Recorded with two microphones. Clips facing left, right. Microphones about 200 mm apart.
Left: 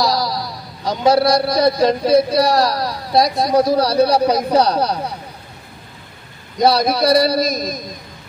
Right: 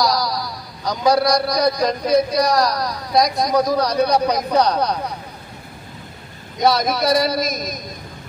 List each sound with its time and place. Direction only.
0.0 s a sound: 25° left (ahead or behind)
2.3 s a woman's voice: 30° left (ahead or behind)
6.6 s a man's voice: 35° left (ahead or behind)